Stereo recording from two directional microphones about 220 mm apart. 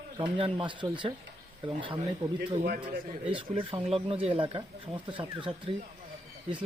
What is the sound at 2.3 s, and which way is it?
Speech, 45° right (ahead or behind).